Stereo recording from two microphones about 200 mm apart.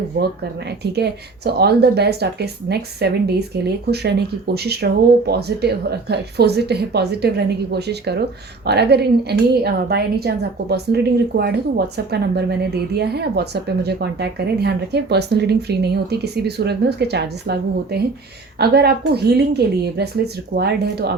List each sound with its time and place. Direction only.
0.8 s speech: 55° right (ahead or behind)